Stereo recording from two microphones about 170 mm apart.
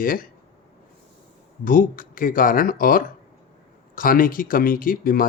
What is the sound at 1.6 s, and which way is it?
A man's voice, 55° left (ahead or behind).